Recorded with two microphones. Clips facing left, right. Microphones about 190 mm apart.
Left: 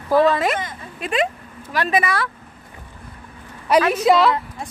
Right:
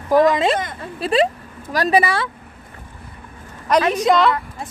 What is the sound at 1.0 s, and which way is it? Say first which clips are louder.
Speech: right 5 dB; 35° right (ahead or behind).